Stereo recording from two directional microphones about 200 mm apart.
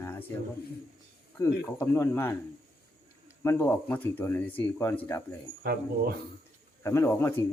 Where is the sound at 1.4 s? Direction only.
15° left (ahead or behind).